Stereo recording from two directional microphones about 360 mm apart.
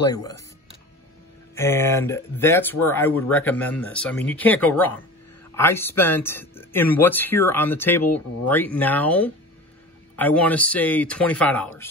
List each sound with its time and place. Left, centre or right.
0.0 s speech: centre
1.5 s speech: centre